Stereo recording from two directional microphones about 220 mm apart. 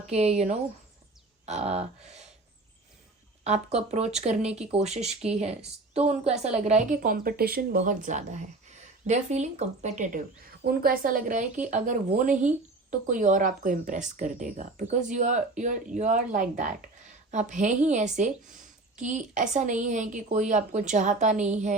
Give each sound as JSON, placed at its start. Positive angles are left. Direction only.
{"t": 0.1, "sound": "speech", "side_deg": -30}
{"t": 3.4, "sound": "a woman's voice", "side_deg": -30}